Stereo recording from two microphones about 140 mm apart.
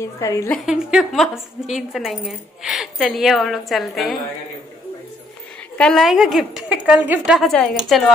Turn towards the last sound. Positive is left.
turn(degrees=5)  # may be behind; listen again after turning